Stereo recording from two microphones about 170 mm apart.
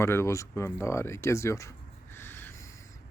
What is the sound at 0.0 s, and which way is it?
Speech, 15° left (ahead or behind).